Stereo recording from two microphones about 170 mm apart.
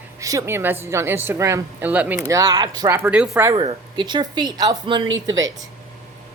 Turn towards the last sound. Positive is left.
turn(degrees=-90)